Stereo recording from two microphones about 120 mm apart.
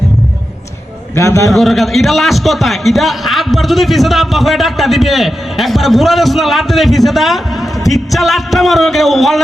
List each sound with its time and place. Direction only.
1.1 s a man's voice: 25° left (ahead or behind)
1.5 s a man's voice: centre (ahead or behind)